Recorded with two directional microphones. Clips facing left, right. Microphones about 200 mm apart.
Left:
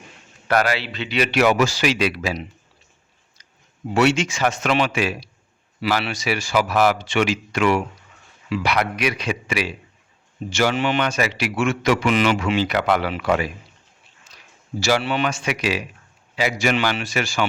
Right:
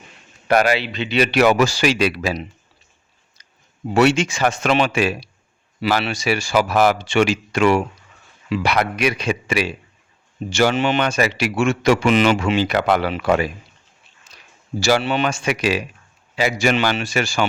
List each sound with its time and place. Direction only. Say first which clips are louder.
0.4 s speech: right 3 dB; 15° right (ahead or behind)
1.2 s speech: right 2 dB; 35° right (ahead or behind)
3.9 s a man's voice: right 3 dB; 35° right (ahead or behind)
14.8 s a man's voice: right 2 dB; 30° right (ahead or behind)